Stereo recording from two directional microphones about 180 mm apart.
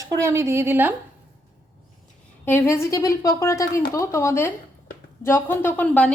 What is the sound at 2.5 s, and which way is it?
A woman's voice, 15° left (ahead or behind).